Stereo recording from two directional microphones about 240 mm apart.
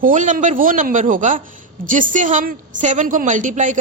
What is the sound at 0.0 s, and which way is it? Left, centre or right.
A woman's voice, right.